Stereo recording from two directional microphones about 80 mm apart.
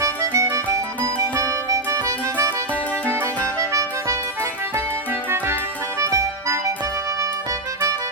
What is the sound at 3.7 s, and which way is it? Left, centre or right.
Music, right.